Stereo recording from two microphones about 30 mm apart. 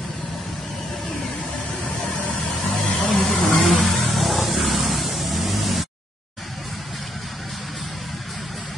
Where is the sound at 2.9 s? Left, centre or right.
Left.